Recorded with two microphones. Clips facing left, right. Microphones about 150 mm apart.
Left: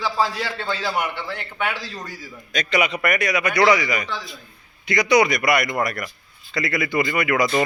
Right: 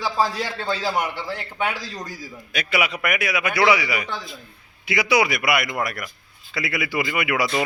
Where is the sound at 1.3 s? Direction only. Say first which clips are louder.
Right 1 dB; 35° right (ahead or behind).